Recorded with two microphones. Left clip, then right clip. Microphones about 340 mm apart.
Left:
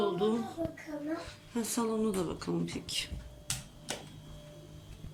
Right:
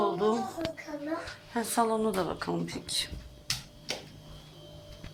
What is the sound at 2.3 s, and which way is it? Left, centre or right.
Speech, centre.